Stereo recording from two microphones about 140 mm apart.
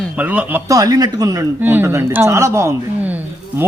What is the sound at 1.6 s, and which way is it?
A man's voice, 15° right (ahead or behind).